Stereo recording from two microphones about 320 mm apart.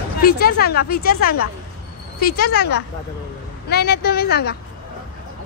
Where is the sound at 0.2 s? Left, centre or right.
Left.